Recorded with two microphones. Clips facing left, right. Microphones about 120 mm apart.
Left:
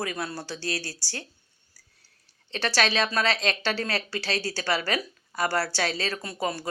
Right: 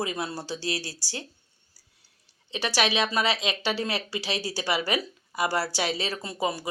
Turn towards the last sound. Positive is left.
turn(degrees=-15)  # may be behind; listen again after turning